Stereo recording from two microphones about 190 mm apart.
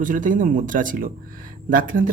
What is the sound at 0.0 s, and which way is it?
Speech, 45° right (ahead or behind).